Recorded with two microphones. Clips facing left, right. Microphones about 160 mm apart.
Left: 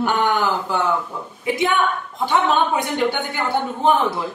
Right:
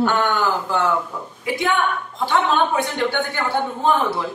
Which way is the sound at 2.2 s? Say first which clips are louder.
Left 1 dB; 15° left (ahead or behind).